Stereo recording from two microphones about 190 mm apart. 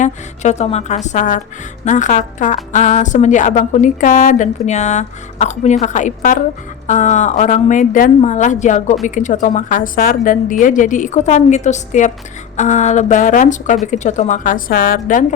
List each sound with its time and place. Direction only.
0.0 s a woman's voice: 35° left (ahead or behind)